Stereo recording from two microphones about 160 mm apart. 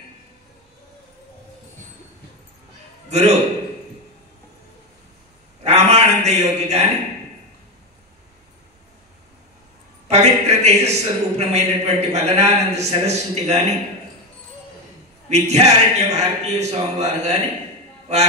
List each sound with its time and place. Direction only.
3.1 s a man's voice: 45° right (ahead or behind)
5.6 s a sound: 45° right (ahead or behind)
10.0 s a man's voice: 45° right (ahead or behind)
15.2 s a man's voice: 45° right (ahead or behind)